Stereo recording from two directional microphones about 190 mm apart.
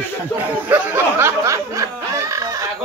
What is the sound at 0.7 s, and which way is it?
Snicker, 10° right (ahead or behind).